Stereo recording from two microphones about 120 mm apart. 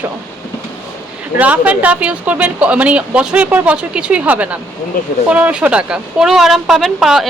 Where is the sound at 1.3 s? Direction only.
10° right (ahead or behind).